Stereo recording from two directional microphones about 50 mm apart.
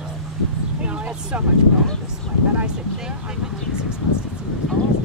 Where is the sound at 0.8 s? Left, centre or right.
Right.